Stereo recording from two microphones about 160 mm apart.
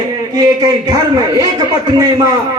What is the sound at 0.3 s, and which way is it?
A man's voice, 25° right (ahead or behind).